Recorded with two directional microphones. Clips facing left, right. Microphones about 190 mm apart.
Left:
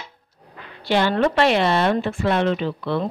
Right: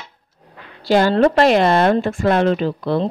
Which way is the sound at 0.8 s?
35° right (ahead or behind).